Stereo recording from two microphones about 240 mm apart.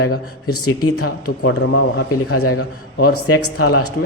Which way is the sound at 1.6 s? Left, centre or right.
Left.